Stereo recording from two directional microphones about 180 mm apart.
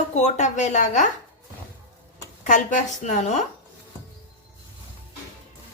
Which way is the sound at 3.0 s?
40° left (ahead or behind).